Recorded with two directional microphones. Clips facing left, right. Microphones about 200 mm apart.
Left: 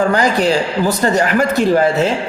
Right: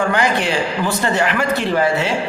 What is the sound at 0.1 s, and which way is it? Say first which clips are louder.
A man's voice: left 4 dB; 40° left (ahead or behind).